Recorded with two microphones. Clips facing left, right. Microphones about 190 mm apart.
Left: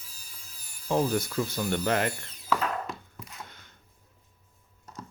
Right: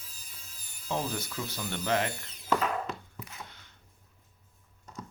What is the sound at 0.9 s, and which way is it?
Speech, 50° left (ahead or behind).